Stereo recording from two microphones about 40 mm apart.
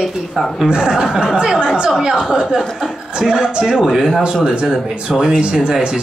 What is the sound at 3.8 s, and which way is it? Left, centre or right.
Speech, centre.